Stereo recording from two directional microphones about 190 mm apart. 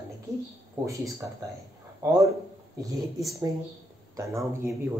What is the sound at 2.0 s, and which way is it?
Speech, 15° right (ahead or behind).